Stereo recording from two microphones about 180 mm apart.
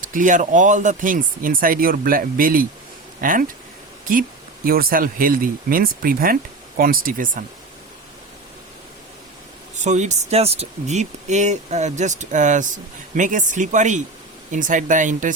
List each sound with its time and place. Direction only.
0.0 s speech: 45° right (ahead or behind)
9.7 s speech: 40° right (ahead or behind)